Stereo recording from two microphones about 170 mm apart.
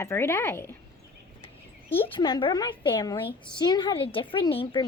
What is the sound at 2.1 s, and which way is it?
A woman's voice, 30° left (ahead or behind).